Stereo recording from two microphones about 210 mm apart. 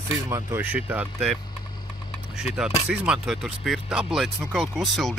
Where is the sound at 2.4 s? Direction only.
5° right (ahead or behind).